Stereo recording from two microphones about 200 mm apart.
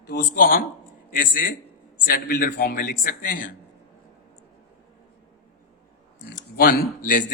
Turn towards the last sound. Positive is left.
turn(degrees=45)  # may be behind; listen again after turning